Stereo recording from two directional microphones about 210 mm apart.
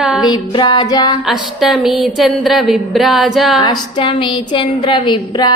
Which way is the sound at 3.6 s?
20° left (ahead or behind).